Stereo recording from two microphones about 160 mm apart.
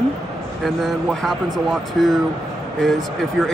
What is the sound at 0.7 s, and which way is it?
Speech, centre (ahead or behind).